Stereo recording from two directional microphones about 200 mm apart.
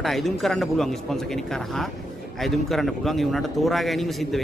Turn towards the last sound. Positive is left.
turn(degrees=0)  # may be behind; listen again after turning